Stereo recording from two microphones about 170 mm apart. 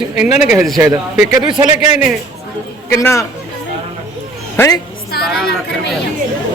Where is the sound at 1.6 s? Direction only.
20° right (ahead or behind).